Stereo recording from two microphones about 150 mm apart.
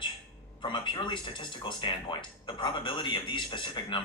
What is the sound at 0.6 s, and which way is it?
Speech, 30° left (ahead or behind).